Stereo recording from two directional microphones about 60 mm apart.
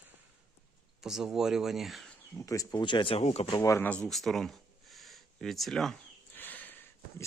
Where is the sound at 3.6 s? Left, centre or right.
Left.